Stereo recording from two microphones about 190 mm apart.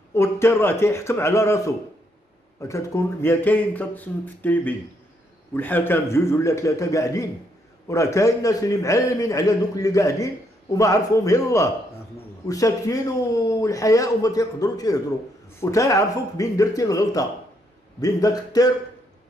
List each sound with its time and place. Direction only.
0.1 s a man's voice: 15° left (ahead or behind)
2.7 s a man's voice: 15° left (ahead or behind)